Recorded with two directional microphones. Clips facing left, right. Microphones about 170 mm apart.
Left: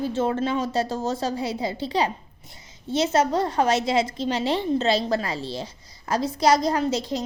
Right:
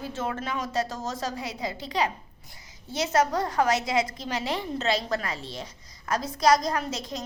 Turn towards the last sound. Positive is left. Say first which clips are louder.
# left 7 dB
turn(degrees=30)  # may be behind; listen again after turning